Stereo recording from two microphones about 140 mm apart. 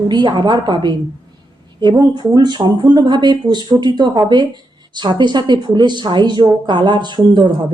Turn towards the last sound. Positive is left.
turn(degrees=-35)  # may be behind; listen again after turning